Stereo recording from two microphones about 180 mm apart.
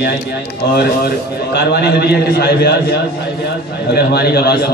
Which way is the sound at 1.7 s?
65° left (ahead or behind).